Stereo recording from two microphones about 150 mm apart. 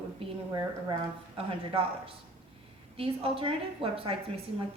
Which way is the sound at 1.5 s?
40° right (ahead or behind).